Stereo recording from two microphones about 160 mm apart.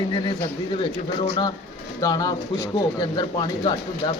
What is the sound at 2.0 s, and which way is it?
Speech, 20° left (ahead or behind).